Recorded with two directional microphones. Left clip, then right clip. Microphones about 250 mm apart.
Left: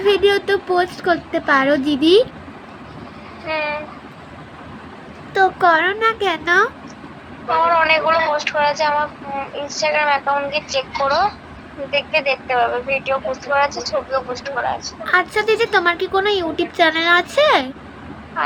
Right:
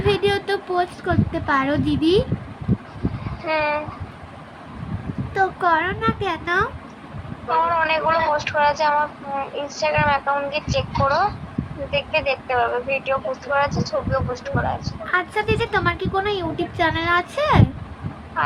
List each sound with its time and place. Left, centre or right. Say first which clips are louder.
0.0 s speech: left 5 dB; centre
3.4 s speech: right 1 dB; right
5.3 s speech: left 5 dB; centre
18.4 s vehicle: left 1 dB; centre